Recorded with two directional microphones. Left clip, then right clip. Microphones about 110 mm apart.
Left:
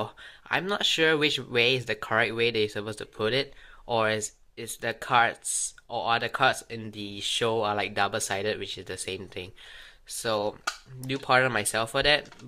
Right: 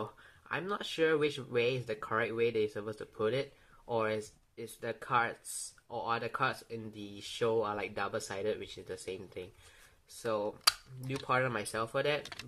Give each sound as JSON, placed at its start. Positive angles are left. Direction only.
{"t": 0.0, "sound": "speech", "side_deg": 20}